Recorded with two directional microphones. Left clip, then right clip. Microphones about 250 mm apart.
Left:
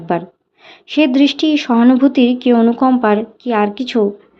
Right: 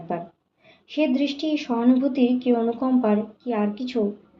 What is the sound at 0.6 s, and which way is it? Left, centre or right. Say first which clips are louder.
A woman's voice: left 10 dB; left.